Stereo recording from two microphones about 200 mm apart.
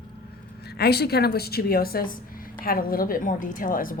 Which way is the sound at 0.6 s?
55° left (ahead or behind).